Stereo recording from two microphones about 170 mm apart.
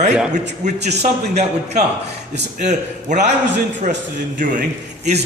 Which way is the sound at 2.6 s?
45° right (ahead or behind).